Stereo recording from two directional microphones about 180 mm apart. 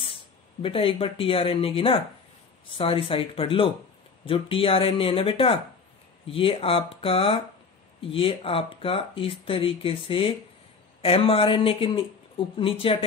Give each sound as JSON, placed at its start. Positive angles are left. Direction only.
{"t": 0.0, "sound": "speech", "side_deg": 30}